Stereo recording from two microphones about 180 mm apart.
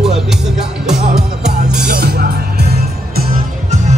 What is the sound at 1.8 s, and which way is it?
Music, 60° right (ahead or behind).